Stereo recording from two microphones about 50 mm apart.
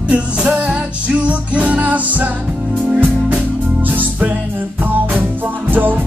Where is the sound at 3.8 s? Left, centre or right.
Right.